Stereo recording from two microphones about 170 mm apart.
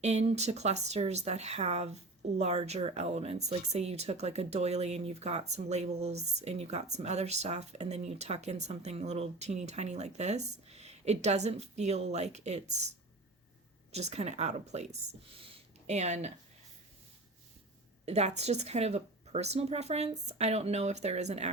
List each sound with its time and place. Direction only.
0.0 s speech: 40° right (ahead or behind)
13.9 s speech: 40° right (ahead or behind)
15.4 s a sound: 35° right (ahead or behind)
18.0 s speech: 40° right (ahead or behind)